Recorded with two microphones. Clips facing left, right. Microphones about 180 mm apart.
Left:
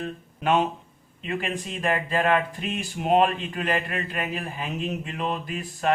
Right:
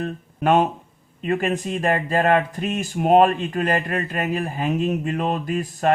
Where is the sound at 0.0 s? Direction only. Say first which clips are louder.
Right 5 dB; 50° right (ahead or behind).